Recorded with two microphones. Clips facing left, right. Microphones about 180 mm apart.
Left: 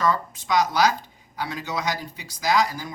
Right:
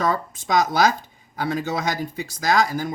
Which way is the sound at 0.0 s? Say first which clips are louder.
Right 1 dB; 45° right (ahead or behind).